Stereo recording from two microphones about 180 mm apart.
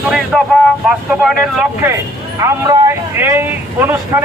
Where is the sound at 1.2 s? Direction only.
5° right (ahead or behind).